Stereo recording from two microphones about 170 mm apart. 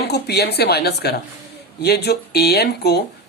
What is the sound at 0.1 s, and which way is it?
Speech, 75° left (ahead or behind).